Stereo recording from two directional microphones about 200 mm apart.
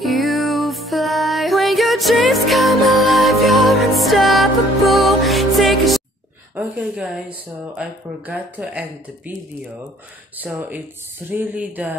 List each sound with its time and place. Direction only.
0.0 s music: centre (ahead or behind)
6.5 s speech: 5° right (ahead or behind)
10.4 s speech: 5° right (ahead or behind)